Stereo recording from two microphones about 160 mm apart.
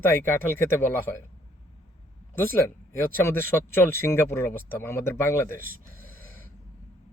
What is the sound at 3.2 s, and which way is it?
Speech, 15° left (ahead or behind).